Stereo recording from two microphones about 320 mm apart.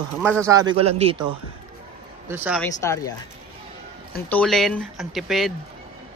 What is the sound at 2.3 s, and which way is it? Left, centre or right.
Speech, centre.